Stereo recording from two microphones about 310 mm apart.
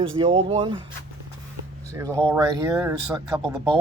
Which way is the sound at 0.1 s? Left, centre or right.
Centre.